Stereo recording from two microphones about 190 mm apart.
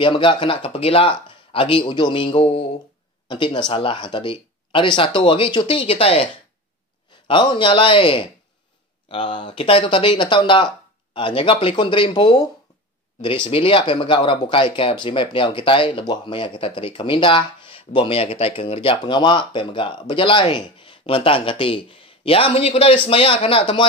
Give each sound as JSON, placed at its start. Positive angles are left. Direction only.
{"t": 0.0, "sound": "speech", "side_deg": 25}
{"t": 7.2, "sound": "speech", "side_deg": 25}